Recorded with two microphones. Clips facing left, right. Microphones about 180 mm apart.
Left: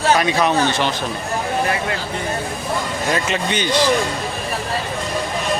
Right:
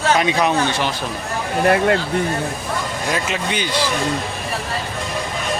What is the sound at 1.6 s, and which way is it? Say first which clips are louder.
Speech: right 7 dB; 60° right (ahead or behind).